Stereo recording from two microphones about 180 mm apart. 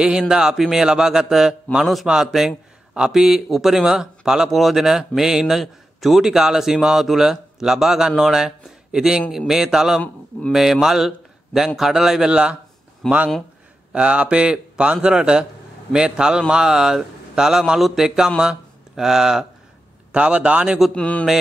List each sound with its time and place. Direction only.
0.0 s a man's voice: 5° right (ahead or behind)
20.9 s a man's voice: 5° left (ahead or behind)